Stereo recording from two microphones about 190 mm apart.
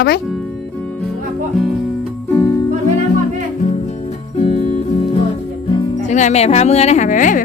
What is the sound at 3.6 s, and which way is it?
Music, 40° left (ahead or behind).